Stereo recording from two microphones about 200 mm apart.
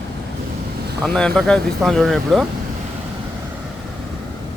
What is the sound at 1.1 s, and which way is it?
Speech, 5° left (ahead or behind).